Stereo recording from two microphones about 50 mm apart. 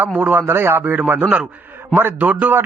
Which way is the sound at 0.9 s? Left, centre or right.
Right.